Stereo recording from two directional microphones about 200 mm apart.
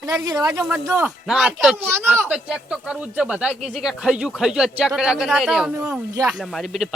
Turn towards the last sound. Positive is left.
turn(degrees=0)  # may be behind; listen again after turning